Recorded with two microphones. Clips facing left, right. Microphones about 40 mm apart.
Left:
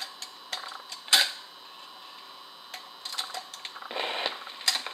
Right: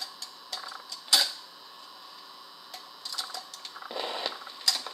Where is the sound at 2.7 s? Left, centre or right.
Left.